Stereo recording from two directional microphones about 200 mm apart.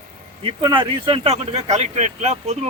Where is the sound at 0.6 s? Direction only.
25° right (ahead or behind).